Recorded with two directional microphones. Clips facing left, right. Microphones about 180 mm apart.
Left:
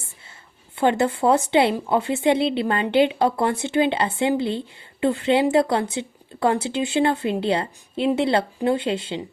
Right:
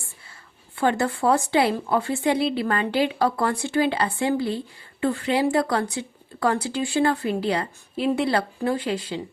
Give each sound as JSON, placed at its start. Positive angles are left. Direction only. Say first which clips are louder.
{"t": 0.8, "sound": "a woman's voice", "louder": "left 3 dB", "side_deg": 20}